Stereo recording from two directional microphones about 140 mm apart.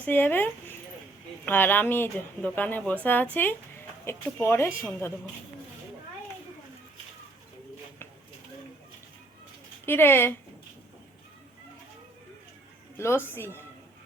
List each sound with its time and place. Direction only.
0.0 s speech: 15° left (ahead or behind)
9.8 s speech: 15° left (ahead or behind)
13.0 s speech: 15° left (ahead or behind)